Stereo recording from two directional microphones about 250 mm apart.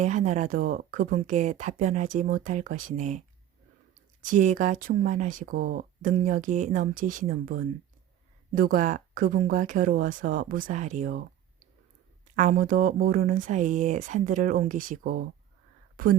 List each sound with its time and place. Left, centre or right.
0.0 s speech: right
12.4 s speech: right